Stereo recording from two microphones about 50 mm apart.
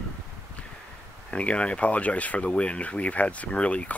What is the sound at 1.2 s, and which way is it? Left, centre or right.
Speech, left.